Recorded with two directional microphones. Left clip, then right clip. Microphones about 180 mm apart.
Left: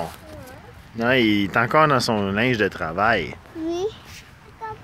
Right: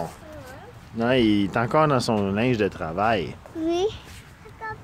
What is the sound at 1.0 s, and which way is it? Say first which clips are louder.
Speech: left 2 dB; centre (ahead or behind).